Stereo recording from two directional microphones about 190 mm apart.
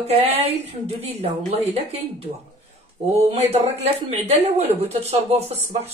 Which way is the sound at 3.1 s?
35° right (ahead or behind).